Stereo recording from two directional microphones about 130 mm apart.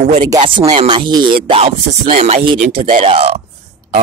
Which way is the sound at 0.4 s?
40° right (ahead or behind).